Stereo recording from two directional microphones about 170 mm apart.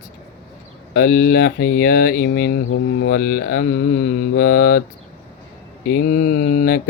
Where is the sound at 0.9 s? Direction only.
60° left (ahead or behind).